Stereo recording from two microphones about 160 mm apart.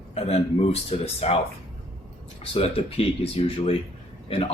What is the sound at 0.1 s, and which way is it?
Speech, 40° left (ahead or behind).